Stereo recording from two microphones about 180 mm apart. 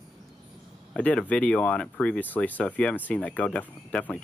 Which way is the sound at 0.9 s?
5° left (ahead or behind).